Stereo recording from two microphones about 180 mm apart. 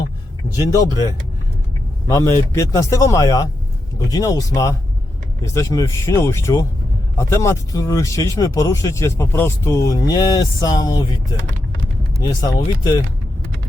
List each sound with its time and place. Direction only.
2.0 s speech: 15° left (ahead or behind)